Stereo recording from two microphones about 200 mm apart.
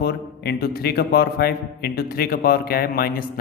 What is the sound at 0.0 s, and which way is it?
Speech, 55° left (ahead or behind).